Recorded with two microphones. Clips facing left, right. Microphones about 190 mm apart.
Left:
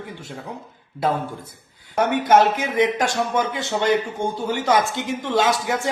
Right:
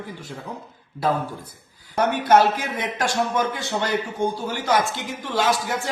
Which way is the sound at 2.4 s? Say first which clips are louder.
Left 3 dB; 20° left (ahead or behind).